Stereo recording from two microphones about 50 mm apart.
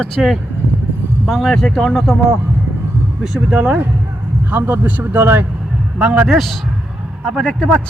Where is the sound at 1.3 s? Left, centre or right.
Centre.